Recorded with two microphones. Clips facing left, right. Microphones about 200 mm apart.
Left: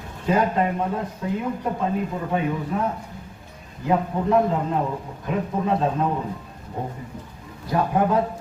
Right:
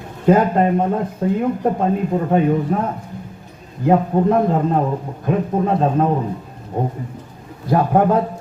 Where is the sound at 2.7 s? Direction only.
50° right (ahead or behind).